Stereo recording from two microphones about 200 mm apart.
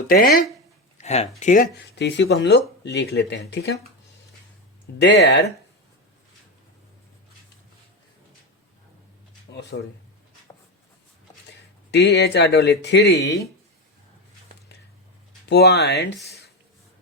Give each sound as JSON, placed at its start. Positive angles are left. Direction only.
{"t": 0.1, "sound": "speech", "side_deg": 45}
{"t": 0.9, "sound": "a sound", "side_deg": 35}
{"t": 1.4, "sound": "speech", "side_deg": 40}
{"t": 2.0, "sound": "speech", "side_deg": 60}
{"t": 4.9, "sound": "speech", "side_deg": 55}
{"t": 9.5, "sound": "speech", "side_deg": 60}
{"t": 11.9, "sound": "speech", "side_deg": 60}
{"t": 15.4, "sound": "speech", "side_deg": 55}